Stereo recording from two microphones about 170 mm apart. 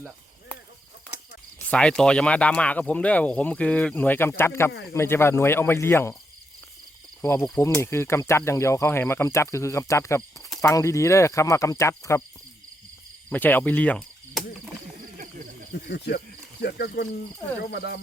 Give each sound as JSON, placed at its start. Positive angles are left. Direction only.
{"t": 1.7, "sound": "speech", "side_deg": 5}
{"t": 7.2, "sound": "speech", "side_deg": 15}
{"t": 13.3, "sound": "speech", "side_deg": 10}
{"t": 15.7, "sound": "speech", "side_deg": 85}